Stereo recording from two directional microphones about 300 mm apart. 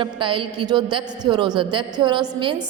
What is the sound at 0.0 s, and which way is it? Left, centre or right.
A woman's voice, centre.